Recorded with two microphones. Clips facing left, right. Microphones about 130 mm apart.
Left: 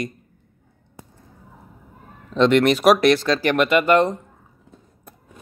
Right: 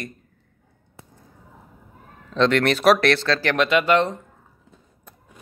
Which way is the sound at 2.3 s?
5° left (ahead or behind).